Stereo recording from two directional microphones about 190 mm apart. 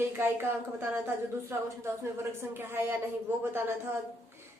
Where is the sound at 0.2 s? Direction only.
10° right (ahead or behind).